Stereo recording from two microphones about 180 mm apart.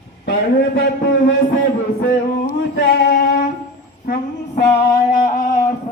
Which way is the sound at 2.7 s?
80° left.